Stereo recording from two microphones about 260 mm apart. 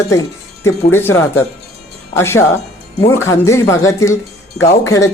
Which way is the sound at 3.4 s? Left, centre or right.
Centre.